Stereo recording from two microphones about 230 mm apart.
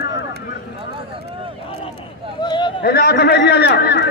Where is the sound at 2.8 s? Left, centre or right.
Left.